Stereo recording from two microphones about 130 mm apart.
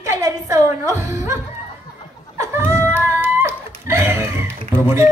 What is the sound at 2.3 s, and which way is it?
Music, 20° right (ahead or behind).